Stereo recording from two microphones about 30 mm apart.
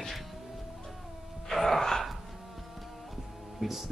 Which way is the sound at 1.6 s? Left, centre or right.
Centre.